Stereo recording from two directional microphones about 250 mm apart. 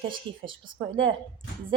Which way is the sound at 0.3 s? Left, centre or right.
Centre.